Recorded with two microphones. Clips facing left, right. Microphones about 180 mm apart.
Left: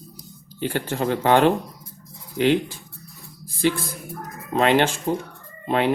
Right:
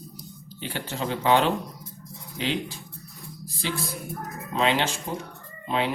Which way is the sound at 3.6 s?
50° left (ahead or behind).